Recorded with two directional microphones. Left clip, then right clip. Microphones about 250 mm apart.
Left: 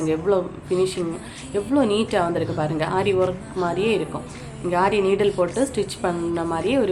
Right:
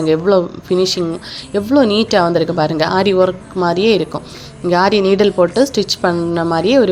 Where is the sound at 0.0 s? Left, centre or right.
Right.